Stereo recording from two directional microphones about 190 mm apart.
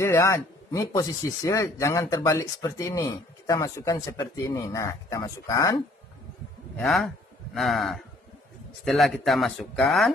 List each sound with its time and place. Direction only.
0.0 s speech: 15° left (ahead or behind)
6.8 s speech: centre (ahead or behind)